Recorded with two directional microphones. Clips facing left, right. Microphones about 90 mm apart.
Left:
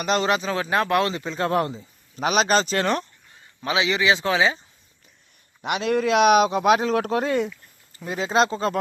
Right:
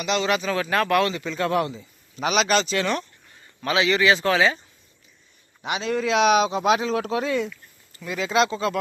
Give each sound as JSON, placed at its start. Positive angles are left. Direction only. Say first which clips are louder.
{"t": 0.0, "sound": "speech", "louder": "left 2 dB", "side_deg": 45}
{"t": 0.3, "sound": "speech", "louder": "even", "side_deg": 30}
{"t": 3.6, "sound": "speech", "louder": "right 2 dB", "side_deg": 20}
{"t": 5.6, "sound": "speech", "louder": "left 3 dB", "side_deg": 60}
{"t": 7.9, "sound": "speech", "louder": "left 1 dB", "side_deg": 35}